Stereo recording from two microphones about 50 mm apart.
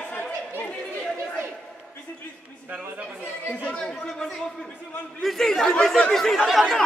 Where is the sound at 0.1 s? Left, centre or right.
Left.